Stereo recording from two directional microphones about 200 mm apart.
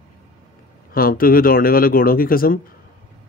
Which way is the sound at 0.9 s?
45° left (ahead or behind).